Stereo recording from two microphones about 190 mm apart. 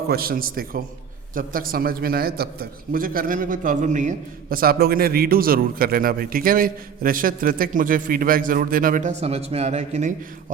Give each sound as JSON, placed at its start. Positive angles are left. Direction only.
{"t": 0.1, "sound": "a man's voice", "side_deg": -50}